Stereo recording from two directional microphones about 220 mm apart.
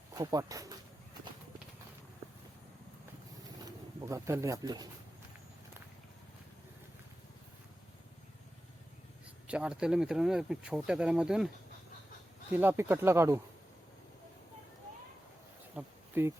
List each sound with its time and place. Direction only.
0.1 s speech: 15° right (ahead or behind)
3.4 s pigeon: 15° right (ahead or behind)
9.5 s speech: 5° right (ahead or behind)
15.7 s insect: 10° right (ahead or behind)